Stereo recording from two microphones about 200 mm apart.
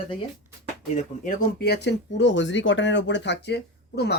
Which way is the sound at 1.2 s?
50° left (ahead or behind).